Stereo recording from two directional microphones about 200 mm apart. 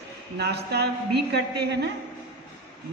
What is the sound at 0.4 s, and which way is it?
A woman's voice, 55° right (ahead or behind).